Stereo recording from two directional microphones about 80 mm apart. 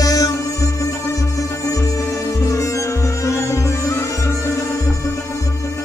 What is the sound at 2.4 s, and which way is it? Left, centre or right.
Music, left.